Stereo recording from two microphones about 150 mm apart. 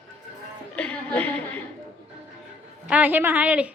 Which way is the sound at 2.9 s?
10° right (ahead or behind).